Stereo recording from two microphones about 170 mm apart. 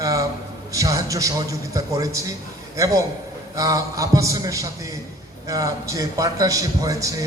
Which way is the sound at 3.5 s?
20° right (ahead or behind).